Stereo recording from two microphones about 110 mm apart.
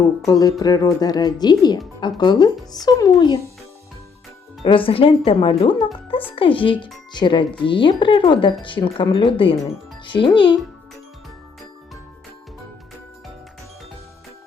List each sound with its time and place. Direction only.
0.3 s speech: 35° left (ahead or behind)
4.6 s speech: 55° left (ahead or behind)